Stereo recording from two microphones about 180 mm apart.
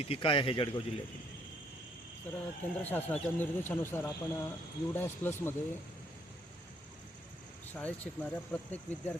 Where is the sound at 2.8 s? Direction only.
10° left (ahead or behind).